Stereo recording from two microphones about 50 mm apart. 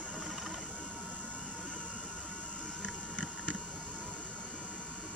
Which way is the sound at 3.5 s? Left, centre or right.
Left.